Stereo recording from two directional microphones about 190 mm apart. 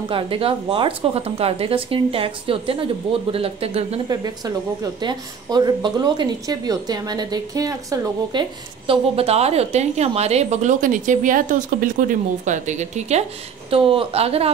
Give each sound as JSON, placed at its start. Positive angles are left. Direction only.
{"t": 0.1, "sound": "speech", "side_deg": -30}
{"t": 4.1, "sound": "a woman's voice", "side_deg": -20}